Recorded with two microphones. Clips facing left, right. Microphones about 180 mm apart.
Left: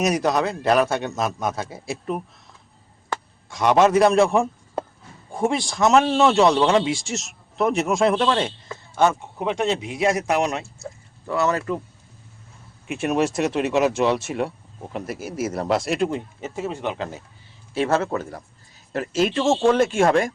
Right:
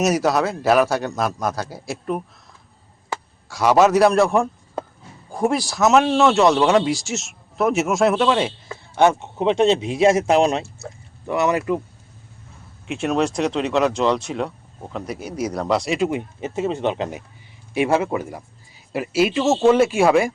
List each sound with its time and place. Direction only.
0.0 s speech: 5° right (ahead or behind)
9.0 s speech: 25° right (ahead or behind)
12.9 s speech: 5° left (ahead or behind)
16.0 s speech: 15° right (ahead or behind)